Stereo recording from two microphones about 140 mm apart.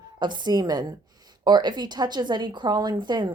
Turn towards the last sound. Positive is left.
turn(degrees=-35)  # may be behind; listen again after turning